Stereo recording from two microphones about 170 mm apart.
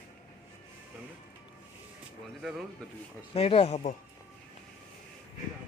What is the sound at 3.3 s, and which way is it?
Speech, 35° left (ahead or behind).